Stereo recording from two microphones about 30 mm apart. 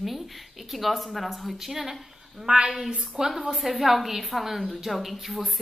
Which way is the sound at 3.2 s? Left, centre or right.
Centre.